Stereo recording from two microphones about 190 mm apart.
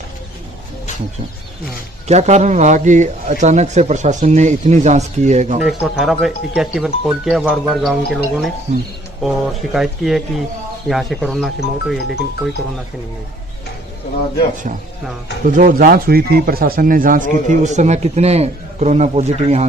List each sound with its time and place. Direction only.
2.0 s speech: 35° right (ahead or behind)
5.9 s speech: centre (ahead or behind)
8.7 s speech: 40° right (ahead or behind)
9.2 s speech: centre (ahead or behind)
15.4 s speech: 45° right (ahead or behind)